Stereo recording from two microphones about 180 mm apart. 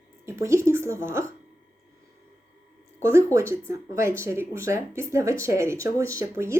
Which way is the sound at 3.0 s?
15° right (ahead or behind).